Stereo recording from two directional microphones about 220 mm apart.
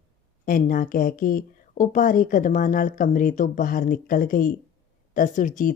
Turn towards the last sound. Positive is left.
turn(degrees=35)  # may be behind; listen again after turning